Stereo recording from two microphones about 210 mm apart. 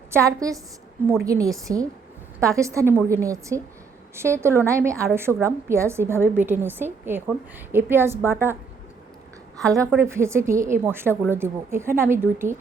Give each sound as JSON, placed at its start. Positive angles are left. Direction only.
{"t": 0.1, "sound": "a woman's voice", "side_deg": -15}
{"t": 9.6, "sound": "a woman's voice", "side_deg": -15}